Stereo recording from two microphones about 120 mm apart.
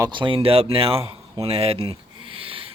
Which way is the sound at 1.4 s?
55° right (ahead or behind).